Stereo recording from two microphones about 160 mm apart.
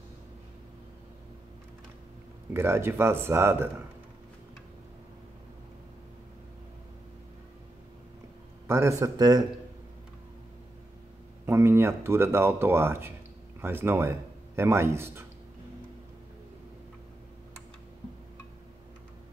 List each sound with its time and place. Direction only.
2.5 s speech: 15° right (ahead or behind)
8.6 s a man's voice: 15° right (ahead or behind)
11.4 s a man's voice: 15° right (ahead or behind)